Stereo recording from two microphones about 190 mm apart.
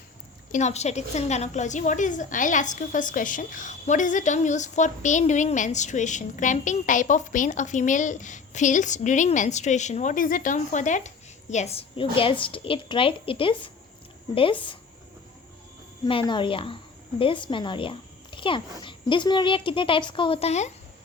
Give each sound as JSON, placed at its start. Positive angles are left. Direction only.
{"t": 0.5, "sound": "a woman's voice", "side_deg": 35}
{"t": 16.0, "sound": "a woman's voice", "side_deg": 25}